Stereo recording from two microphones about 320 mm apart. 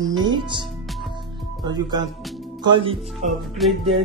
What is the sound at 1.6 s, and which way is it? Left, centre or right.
Speech, centre.